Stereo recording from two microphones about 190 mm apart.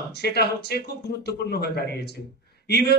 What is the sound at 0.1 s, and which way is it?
A man's voice, 60° left (ahead or behind).